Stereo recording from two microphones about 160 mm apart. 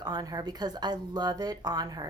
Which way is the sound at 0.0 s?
25° right (ahead or behind).